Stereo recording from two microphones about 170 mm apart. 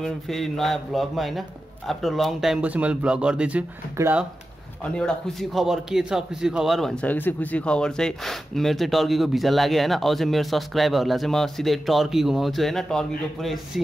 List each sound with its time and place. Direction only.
0.0 s a man's voice: centre (ahead or behind)
4.8 s a man's voice: 5° left (ahead or behind)